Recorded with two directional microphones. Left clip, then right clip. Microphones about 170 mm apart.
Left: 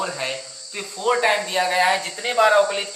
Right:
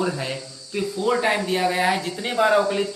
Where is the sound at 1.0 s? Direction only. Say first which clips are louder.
Left 3 dB; 35° left (ahead or behind).